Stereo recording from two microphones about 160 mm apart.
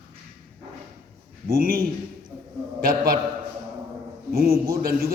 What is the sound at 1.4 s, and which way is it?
A man's voice, 65° right (ahead or behind).